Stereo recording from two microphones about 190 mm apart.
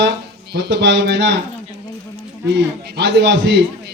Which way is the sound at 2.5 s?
65° right (ahead or behind).